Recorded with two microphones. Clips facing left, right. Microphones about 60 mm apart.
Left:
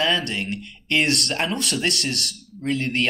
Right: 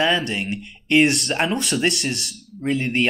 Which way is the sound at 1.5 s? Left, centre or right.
Right.